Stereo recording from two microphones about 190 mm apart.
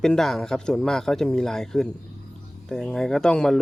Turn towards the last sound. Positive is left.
turn(degrees=5)  # may be behind; listen again after turning